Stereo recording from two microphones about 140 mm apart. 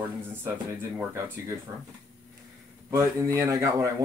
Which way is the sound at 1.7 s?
25° right (ahead or behind).